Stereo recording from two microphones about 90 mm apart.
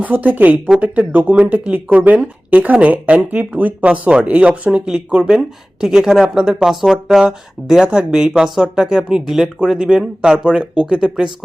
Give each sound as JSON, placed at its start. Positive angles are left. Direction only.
{"t": 0.0, "sound": "speech", "side_deg": -15}